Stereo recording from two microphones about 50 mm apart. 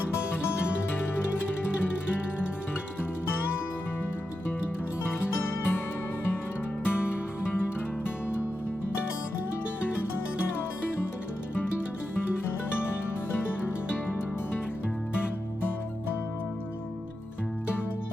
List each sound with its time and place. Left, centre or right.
5.0 s music: left
6.8 s music: left
12.9 s music: left